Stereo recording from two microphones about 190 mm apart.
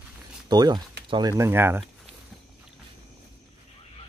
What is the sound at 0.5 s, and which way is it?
Speech, 20° right (ahead or behind).